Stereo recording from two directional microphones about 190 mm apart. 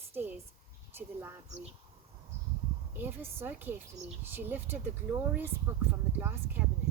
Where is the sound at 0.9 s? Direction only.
10° right (ahead or behind).